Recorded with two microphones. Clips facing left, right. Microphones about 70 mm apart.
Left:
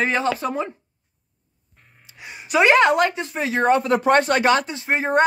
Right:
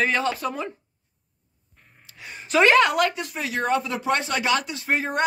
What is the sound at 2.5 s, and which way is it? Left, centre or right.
Speech, centre.